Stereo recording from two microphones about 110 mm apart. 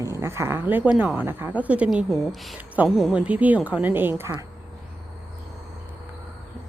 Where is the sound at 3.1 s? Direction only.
10° right (ahead or behind).